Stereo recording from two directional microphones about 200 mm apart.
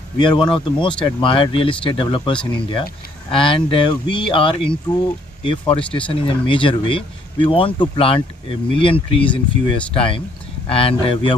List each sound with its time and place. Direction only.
0.2 s speech: 25° left (ahead or behind)
3.3 s speech: 25° left (ahead or behind)